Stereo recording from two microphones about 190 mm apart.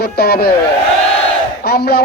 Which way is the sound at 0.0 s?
55° left (ahead or behind).